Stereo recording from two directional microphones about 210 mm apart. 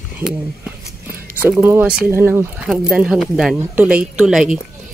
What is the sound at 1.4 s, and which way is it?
Speech, 10° right (ahead or behind).